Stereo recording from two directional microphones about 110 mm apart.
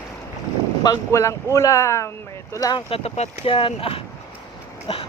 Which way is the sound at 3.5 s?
55° left (ahead or behind).